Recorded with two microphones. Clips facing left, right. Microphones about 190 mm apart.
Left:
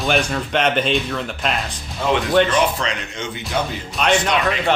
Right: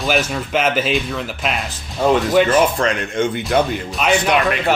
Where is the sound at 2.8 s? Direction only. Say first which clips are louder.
Right 8 dB; 50° right (ahead or behind).